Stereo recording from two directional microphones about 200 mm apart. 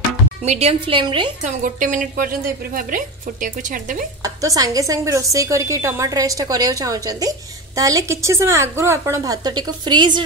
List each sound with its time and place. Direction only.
0.4 s a woman's voice: 30° right (ahead or behind)
1.4 s a woman's voice: 40° right (ahead or behind)
4.2 s a woman's voice: 15° right (ahead or behind)